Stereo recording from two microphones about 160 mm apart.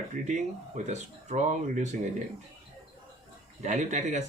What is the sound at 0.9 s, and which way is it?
Speech, 45° right (ahead or behind).